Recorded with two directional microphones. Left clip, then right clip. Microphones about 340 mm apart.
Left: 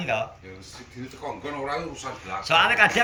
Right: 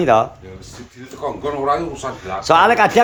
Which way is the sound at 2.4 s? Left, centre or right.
Centre.